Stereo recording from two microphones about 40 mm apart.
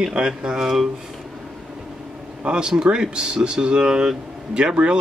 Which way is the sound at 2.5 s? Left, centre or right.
Right.